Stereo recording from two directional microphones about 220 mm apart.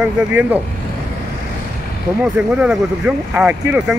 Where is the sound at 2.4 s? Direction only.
5° right (ahead or behind).